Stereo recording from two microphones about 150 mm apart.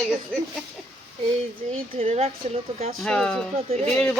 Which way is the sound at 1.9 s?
40° right (ahead or behind).